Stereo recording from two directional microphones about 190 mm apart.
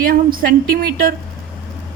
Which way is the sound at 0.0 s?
50° right (ahead or behind).